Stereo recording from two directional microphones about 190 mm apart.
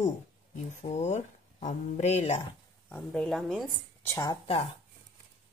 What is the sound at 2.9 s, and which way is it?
Speech, 5° left (ahead or behind).